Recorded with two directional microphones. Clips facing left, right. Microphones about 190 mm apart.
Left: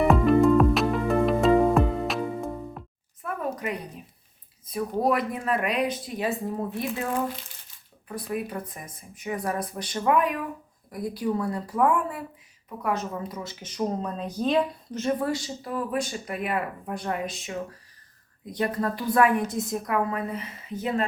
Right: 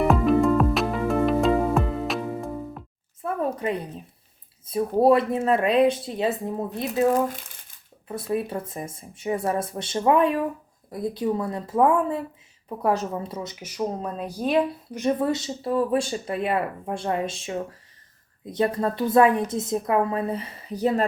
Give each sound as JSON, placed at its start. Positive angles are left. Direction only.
{"t": 0.0, "sound": "music", "side_deg": 0}
{"t": 3.2, "sound": "a sound", "side_deg": -30}
{"t": 4.7, "sound": "speech", "side_deg": -30}
{"t": 7.1, "sound": "speech", "side_deg": -45}
{"t": 8.0, "sound": "speech", "side_deg": -25}
{"t": 12.6, "sound": "a woman's voice", "side_deg": -35}
{"t": 13.5, "sound": "speech", "side_deg": -10}